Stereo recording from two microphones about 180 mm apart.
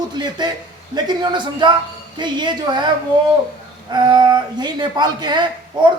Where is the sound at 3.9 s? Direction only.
25° right (ahead or behind).